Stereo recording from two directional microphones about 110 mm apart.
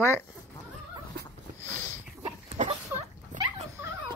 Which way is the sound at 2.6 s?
90° right.